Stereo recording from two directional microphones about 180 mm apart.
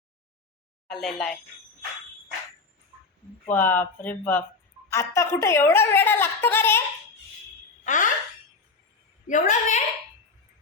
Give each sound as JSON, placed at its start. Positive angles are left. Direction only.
{"t": 0.9, "sound": "speech", "side_deg": 0}
{"t": 3.5, "sound": "a woman's voice", "side_deg": 10}
{"t": 7.9, "sound": "alarm", "side_deg": 45}
{"t": 9.2, "sound": "a woman's voice", "side_deg": 45}